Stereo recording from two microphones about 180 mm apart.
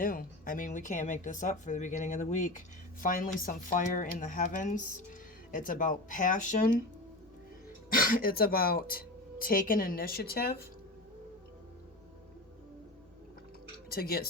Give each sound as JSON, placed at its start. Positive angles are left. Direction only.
{"t": 0.0, "sound": "speech", "side_deg": 50}
{"t": 7.9, "sound": "speech", "side_deg": 50}
{"t": 13.9, "sound": "speech", "side_deg": 55}